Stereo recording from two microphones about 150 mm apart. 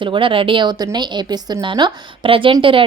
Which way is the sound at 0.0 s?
35° right (ahead or behind).